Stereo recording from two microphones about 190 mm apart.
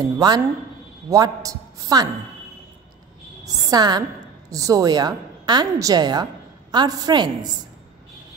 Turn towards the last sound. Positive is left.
turn(degrees=-25)  # may be behind; listen again after turning